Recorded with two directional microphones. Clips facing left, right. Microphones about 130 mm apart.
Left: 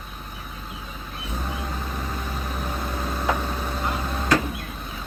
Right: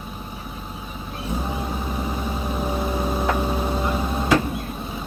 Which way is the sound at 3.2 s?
10° right (ahead or behind).